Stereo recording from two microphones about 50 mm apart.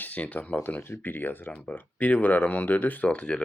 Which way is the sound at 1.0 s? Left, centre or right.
Left.